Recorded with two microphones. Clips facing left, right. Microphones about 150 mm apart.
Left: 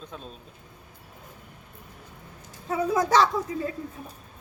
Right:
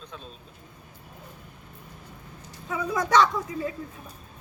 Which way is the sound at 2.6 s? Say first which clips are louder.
Left 4 dB; 30° left (ahead or behind).